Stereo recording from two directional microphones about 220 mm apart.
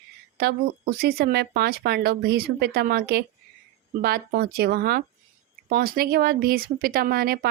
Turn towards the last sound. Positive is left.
turn(degrees=-45)  # may be behind; listen again after turning